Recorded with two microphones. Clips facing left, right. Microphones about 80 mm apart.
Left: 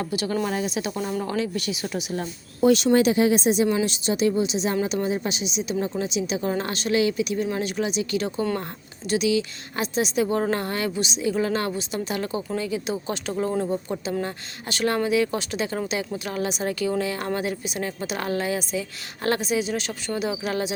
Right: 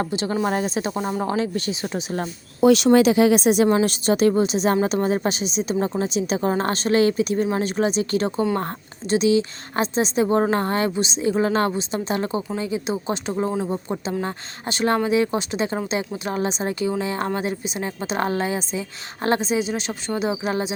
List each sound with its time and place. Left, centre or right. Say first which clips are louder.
0.1 s a woman's voice: right 3 dB; right
2.6 s speech: right 3 dB; right
3.7 s a woman's voice: right 5 dB; right